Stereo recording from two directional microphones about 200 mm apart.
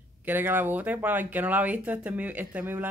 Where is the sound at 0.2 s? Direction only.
10° right (ahead or behind).